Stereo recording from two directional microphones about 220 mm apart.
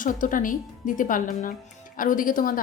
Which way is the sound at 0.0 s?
35° left (ahead or behind).